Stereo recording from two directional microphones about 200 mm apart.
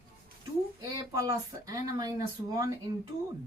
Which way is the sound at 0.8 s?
20° right (ahead or behind).